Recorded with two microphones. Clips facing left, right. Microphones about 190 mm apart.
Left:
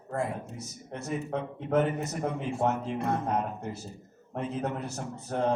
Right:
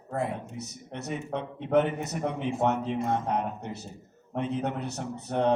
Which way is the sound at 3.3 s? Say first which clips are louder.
Even; 65° right (ahead or behind).